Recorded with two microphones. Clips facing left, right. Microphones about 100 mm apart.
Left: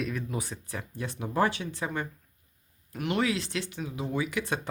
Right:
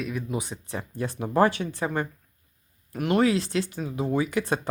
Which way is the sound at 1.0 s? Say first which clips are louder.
Right 6 dB; 45° right (ahead or behind).